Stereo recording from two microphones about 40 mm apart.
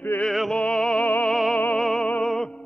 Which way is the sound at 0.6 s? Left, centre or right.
Left.